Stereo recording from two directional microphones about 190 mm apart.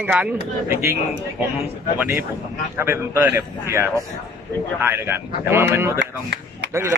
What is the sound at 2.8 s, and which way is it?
Speech, 10° right (ahead or behind).